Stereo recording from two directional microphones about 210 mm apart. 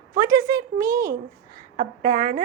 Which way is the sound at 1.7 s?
35° right (ahead or behind).